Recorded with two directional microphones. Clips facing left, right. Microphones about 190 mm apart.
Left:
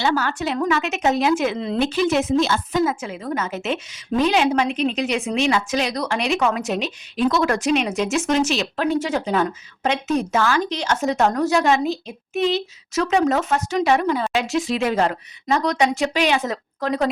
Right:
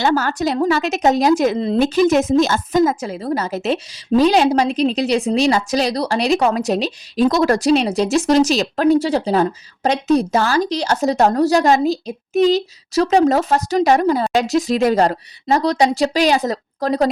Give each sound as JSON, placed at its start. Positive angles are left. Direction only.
{"t": 0.0, "sound": "speech", "side_deg": -40}